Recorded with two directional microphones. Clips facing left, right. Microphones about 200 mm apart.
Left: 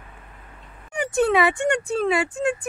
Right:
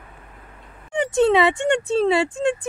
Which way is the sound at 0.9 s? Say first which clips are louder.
Right 3 dB; 25° right (ahead or behind).